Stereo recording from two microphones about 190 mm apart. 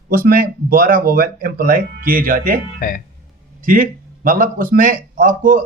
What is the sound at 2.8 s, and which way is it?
Speech, 45° left (ahead or behind).